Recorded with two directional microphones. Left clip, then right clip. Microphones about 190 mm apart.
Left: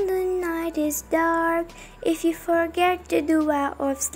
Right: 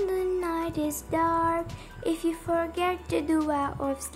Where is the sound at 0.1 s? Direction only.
15° left (ahead or behind).